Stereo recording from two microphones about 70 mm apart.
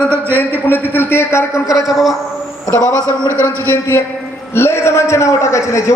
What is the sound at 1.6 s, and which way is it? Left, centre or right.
Speech, left.